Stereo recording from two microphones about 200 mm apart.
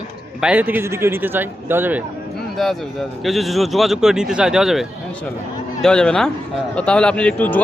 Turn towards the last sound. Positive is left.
turn(degrees=10)  # may be behind; listen again after turning